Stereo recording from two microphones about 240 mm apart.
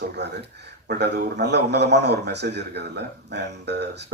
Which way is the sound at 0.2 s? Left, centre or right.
Right.